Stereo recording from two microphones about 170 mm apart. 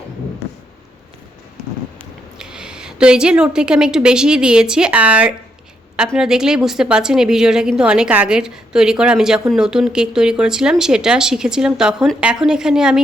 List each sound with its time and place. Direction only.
2.4 s a woman's voice: 5° right (ahead or behind)